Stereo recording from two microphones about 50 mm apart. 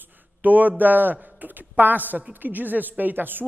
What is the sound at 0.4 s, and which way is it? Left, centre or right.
A woman's voice, right.